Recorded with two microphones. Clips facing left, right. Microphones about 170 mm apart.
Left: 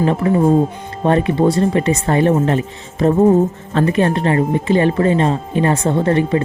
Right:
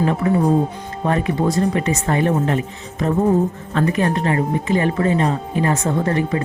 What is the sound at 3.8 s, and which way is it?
Speech, 30° left (ahead or behind).